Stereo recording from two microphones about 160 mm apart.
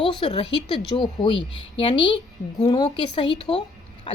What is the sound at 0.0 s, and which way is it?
A woman's voice, 30° left (ahead or behind).